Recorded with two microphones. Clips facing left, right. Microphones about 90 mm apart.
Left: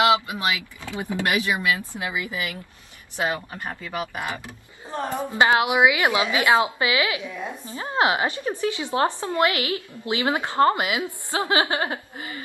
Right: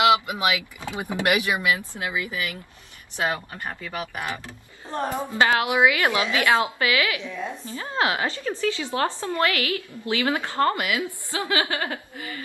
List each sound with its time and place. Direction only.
0.4 s speech: 20° right (ahead or behind)
2.0 s a woman's voice: 20° left (ahead or behind)
4.8 s a woman's voice: centre (ahead or behind)
5.2 s a woman's voice: 20° left (ahead or behind)
7.2 s a woman's voice: 10° left (ahead or behind)
7.6 s a woman's voice: 20° left (ahead or behind)